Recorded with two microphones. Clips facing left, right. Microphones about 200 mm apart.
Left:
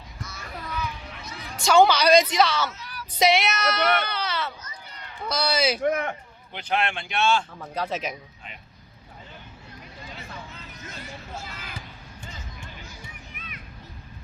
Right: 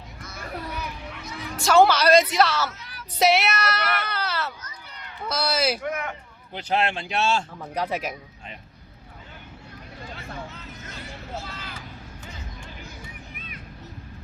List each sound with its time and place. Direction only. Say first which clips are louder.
0.2 s a sound: left 2 dB; 55° right (ahead or behind)
1.6 s a woman's voice: even; 5° right (ahead or behind)
5.8 s speech: left 5 dB; 35° left (ahead or behind)
6.5 s a man's voice: right 2 dB; 35° right (ahead or behind)
7.6 s speech: right 1 dB; 15° right (ahead or behind)